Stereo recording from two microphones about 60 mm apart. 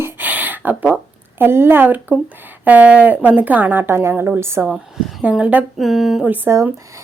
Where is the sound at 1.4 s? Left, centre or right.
Right.